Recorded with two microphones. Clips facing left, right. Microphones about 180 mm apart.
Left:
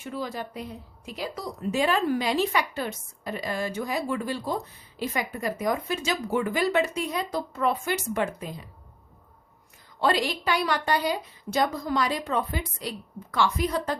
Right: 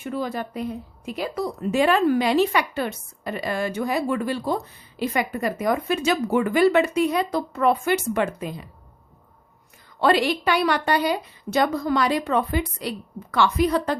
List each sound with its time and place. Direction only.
0.0 s a woman's voice: 55° right (ahead or behind)
10.0 s a woman's voice: 65° right (ahead or behind)